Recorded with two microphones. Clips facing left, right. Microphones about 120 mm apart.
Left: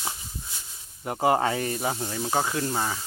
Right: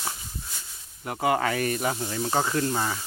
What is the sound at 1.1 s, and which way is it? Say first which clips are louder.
Speech: left 2 dB; 35° left (ahead or behind).